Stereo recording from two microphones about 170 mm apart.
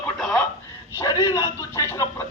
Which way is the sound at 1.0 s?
20° left (ahead or behind).